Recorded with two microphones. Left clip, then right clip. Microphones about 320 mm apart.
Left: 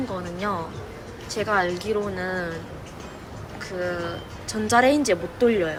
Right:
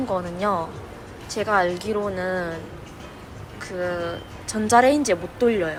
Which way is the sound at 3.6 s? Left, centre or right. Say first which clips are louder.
Right 2 dB; centre.